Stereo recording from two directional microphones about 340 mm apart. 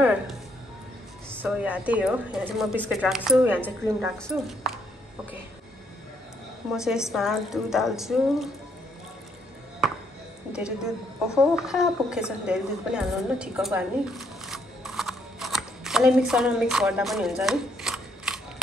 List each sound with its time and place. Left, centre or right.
0.0 s music: centre
1.3 s speech: centre
6.7 s speech: centre
9.8 s music: centre
10.5 s a woman's voice: centre